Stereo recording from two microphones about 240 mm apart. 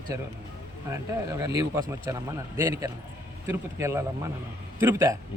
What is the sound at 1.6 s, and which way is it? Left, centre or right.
Speech, centre.